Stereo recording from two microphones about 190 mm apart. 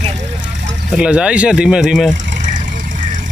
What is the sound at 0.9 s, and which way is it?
Speech, 5° right (ahead or behind).